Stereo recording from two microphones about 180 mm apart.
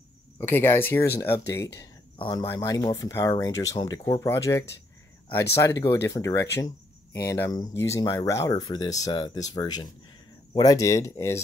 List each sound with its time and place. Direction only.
0.4 s speech: 10° left (ahead or behind)